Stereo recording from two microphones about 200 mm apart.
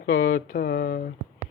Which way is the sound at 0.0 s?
45° left (ahead or behind).